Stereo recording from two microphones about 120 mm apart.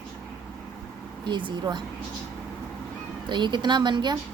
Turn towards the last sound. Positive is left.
turn(degrees=-40)  # may be behind; listen again after turning